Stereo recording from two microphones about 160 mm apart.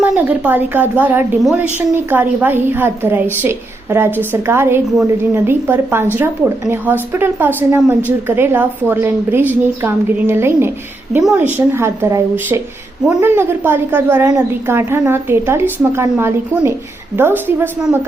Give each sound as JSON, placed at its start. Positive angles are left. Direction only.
{"t": 0.0, "sound": "a woman's voice", "side_deg": -10}